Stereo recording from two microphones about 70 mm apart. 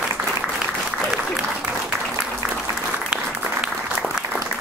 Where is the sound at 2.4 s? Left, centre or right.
Right.